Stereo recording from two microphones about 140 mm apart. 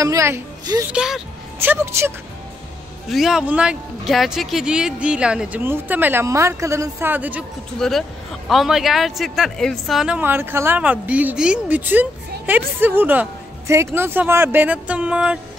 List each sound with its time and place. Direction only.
0.0 s a woman's voice: 20° right (ahead or behind)
0.9 s speech: 5° right (ahead or behind)
1.6 s speech: 15° right (ahead or behind)
3.1 s speech: centre (ahead or behind)
7.8 s speech: 5° left (ahead or behind)